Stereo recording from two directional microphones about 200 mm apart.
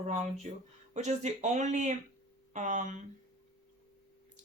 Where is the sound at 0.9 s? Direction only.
35° right (ahead or behind).